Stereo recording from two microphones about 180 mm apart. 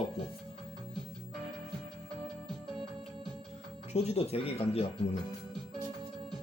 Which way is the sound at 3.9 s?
35° left (ahead or behind).